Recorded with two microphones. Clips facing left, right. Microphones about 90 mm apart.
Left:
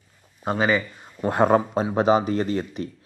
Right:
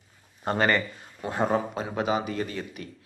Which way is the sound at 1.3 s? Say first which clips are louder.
Left 7 dB; 60° left (ahead or behind).